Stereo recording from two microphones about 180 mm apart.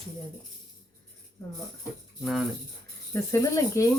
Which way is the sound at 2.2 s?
Centre (ahead or behind).